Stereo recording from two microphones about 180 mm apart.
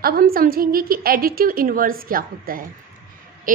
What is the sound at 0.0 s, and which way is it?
A woman's voice, 55° right (ahead or behind).